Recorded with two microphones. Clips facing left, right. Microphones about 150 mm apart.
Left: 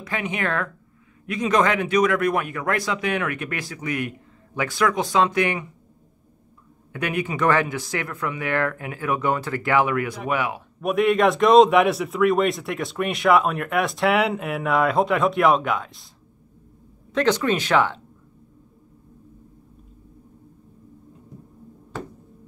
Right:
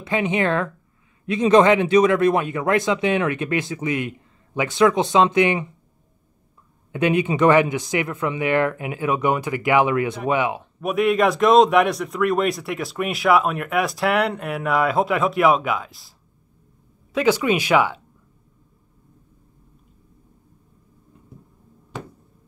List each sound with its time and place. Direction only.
0.0 s speech: 25° right (ahead or behind)
6.9 s speech: 20° right (ahead or behind)
10.8 s a man's voice: centre (ahead or behind)
17.1 s speech: 10° right (ahead or behind)
21.9 s a sound: 15° right (ahead or behind)